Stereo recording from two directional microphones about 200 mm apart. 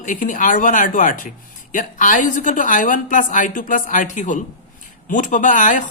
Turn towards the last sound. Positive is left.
turn(degrees=40)  # may be behind; listen again after turning